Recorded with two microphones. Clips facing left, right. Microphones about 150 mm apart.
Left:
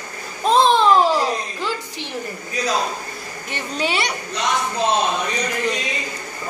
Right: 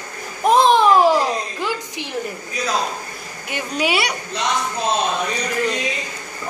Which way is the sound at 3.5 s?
10° right (ahead or behind).